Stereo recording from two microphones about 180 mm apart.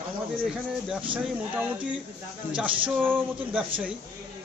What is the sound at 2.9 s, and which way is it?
Speech, 10° right (ahead or behind).